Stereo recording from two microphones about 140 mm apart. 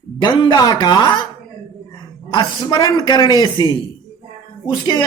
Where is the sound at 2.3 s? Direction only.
30° left (ahead or behind).